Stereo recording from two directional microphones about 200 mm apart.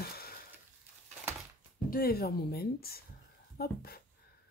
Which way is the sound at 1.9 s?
50° left (ahead or behind).